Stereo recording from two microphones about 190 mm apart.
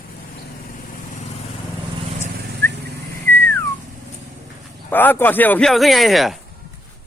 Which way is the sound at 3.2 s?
10° left (ahead or behind).